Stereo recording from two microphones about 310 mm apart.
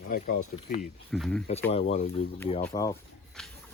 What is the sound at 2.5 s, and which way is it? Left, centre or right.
Speech, centre.